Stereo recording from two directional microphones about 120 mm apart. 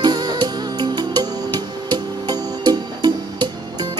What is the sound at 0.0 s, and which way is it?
Music, 35° right (ahead or behind).